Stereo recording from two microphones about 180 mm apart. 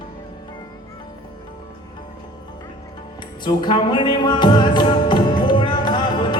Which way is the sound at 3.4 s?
25° left (ahead or behind).